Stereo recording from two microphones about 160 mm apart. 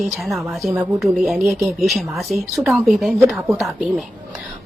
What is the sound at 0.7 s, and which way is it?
Speech, 10° right (ahead or behind).